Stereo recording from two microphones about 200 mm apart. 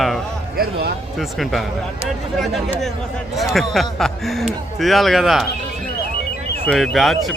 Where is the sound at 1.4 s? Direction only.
Centre (ahead or behind).